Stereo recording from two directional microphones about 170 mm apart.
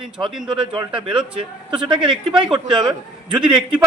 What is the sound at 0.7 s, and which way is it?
Speech, 30° right (ahead or behind).